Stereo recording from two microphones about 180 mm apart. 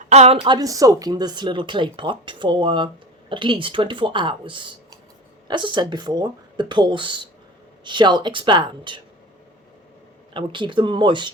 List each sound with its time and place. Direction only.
0.1 s speech: 35° right (ahead or behind)
10.3 s speech: 25° right (ahead or behind)